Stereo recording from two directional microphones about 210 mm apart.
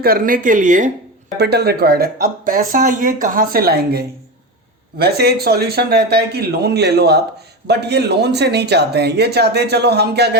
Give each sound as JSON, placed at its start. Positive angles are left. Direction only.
{"t": 0.0, "sound": "speech", "side_deg": -45}
{"t": 1.4, "sound": "speech", "side_deg": -50}